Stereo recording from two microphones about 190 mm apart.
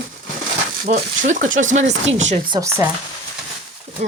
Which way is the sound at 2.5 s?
15° right (ahead or behind).